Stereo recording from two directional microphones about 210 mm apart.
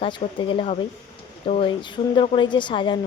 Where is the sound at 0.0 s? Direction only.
25° left (ahead or behind).